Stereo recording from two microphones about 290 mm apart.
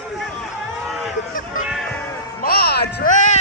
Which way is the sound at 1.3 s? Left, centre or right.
Left.